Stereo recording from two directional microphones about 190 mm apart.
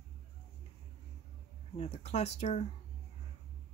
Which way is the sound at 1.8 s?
35° left (ahead or behind).